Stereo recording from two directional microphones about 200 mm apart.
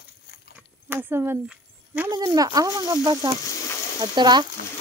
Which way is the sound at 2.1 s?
20° right (ahead or behind).